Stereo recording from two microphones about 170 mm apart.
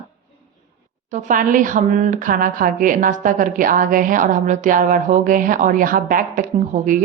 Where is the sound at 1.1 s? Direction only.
50° right (ahead or behind).